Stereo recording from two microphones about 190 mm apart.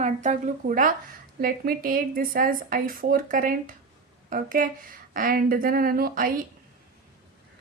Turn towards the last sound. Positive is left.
turn(degrees=-50)  # may be behind; listen again after turning